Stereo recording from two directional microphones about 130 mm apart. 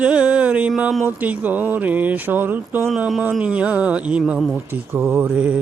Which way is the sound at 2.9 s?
Centre (ahead or behind).